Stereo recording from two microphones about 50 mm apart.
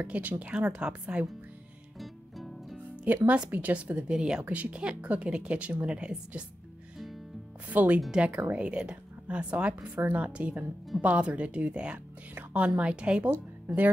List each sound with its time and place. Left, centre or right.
0.0 s speech: right
2.0 s music: centre
3.4 s a woman's voice: right
4.1 s speech: centre
7.7 s a woman's voice: right
9.9 s a woman's voice: right
10.2 s a woman's voice: right